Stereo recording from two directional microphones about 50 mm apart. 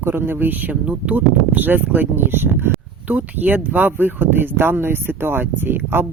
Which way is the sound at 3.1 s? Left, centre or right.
Right.